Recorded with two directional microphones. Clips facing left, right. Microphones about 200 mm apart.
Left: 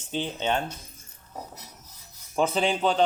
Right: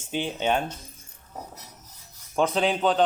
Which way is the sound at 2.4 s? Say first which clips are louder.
Right 1 dB; centre (ahead or behind).